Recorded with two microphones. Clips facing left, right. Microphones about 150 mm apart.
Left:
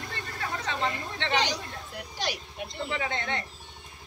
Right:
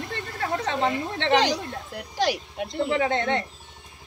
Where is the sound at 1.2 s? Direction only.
75° right (ahead or behind).